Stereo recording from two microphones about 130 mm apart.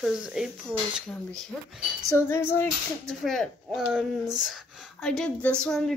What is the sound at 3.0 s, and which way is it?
Speech, 5° left (ahead or behind).